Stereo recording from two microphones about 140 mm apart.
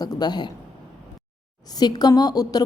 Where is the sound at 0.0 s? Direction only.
30° left (ahead or behind).